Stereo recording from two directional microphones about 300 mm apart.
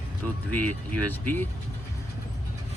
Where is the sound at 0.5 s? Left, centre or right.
Right.